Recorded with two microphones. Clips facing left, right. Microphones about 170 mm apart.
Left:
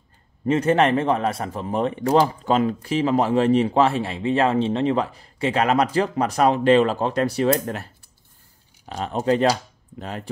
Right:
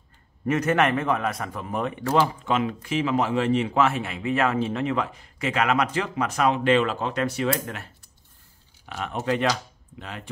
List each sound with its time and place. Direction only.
0.5 s speech: 30° left (ahead or behind)